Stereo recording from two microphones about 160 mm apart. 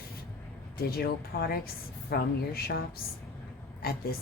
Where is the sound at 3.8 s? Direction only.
70° left (ahead or behind).